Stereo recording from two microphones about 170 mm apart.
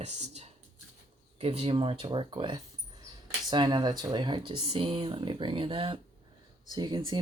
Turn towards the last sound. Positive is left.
turn(degrees=-25)  # may be behind; listen again after turning